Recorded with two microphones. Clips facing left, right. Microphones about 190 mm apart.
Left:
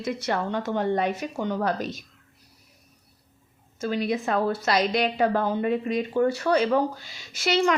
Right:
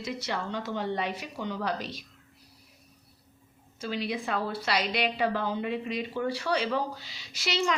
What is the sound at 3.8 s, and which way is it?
Speech, 45° left (ahead or behind).